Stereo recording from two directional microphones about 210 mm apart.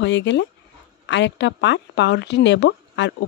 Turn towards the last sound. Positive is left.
turn(degrees=55)  # may be behind; listen again after turning